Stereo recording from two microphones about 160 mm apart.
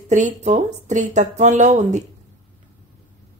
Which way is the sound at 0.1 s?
50° right (ahead or behind).